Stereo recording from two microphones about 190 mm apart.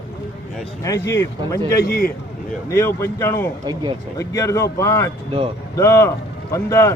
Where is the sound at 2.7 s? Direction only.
15° left (ahead or behind).